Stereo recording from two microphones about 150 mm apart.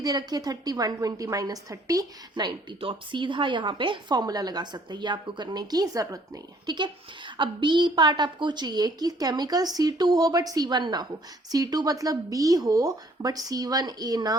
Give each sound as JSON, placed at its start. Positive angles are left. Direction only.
{"t": 0.0, "sound": "a woman's voice", "side_deg": -25}